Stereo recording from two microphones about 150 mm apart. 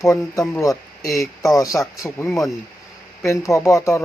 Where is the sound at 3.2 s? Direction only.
20° left (ahead or behind).